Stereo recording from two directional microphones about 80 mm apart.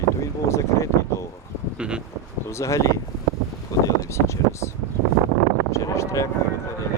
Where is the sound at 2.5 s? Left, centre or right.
Left.